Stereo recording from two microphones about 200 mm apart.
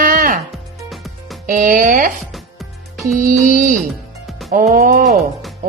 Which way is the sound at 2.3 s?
Centre (ahead or behind).